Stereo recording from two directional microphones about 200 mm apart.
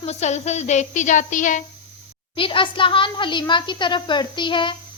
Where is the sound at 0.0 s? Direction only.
35° left (ahead or behind).